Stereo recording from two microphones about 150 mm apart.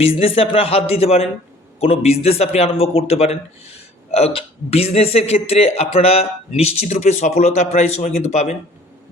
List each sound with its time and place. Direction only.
0.0 s a man's voice: 40° left (ahead or behind)